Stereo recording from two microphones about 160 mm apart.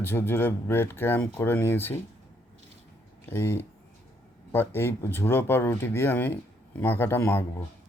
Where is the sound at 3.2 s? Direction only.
15° left (ahead or behind).